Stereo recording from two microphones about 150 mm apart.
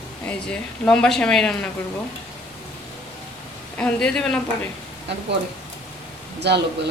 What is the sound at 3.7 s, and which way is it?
Speech, 5° left (ahead or behind).